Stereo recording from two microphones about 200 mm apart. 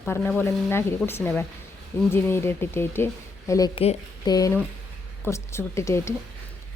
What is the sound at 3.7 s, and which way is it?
A woman's voice, 25° left (ahead or behind).